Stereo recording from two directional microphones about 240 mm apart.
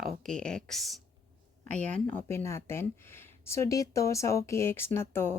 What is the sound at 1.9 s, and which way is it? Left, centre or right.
Speech, centre.